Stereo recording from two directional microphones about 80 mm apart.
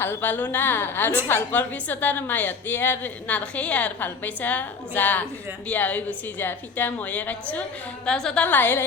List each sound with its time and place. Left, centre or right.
0.0 s a woman's voice: left; by 8.4 s centre
8.4 s a woman's voice: left